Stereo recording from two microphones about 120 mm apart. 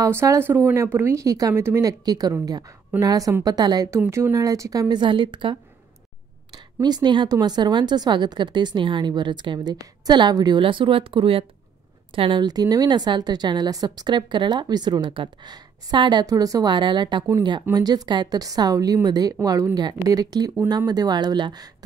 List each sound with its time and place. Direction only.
0.0 s a woman's voice: 25° right (ahead or behind)